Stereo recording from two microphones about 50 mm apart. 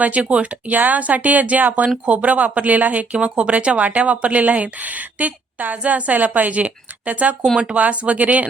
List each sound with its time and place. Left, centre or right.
0.0 s a woman's voice: right